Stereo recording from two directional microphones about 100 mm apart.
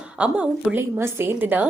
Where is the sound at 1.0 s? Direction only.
25° right (ahead or behind).